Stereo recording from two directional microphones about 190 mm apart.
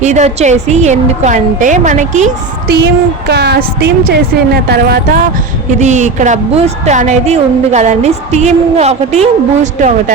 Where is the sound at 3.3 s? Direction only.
60° right (ahead or behind).